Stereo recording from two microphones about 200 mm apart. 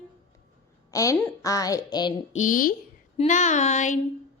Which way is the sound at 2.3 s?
40° left (ahead or behind).